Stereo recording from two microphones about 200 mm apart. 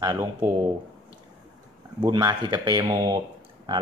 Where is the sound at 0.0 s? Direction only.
20° right (ahead or behind).